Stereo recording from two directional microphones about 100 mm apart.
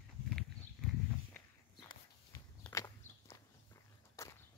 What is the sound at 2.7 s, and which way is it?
Walk, 30° left (ahead or behind).